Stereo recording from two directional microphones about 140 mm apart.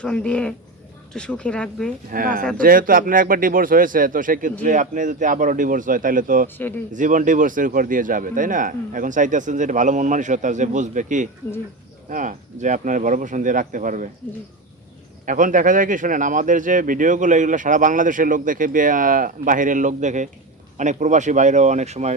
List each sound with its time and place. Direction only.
0.0 s speech: 5° left (ahead or behind)
2.1 s speech: 80° right
6.9 s speech: 65° right (ahead or behind)
15.3 s speech: 70° right (ahead or behind); by 22.1 s 55° right (ahead or behind)